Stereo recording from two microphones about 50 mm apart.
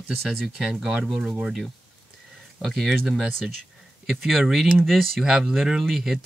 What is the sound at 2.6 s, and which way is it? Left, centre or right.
Speech, centre.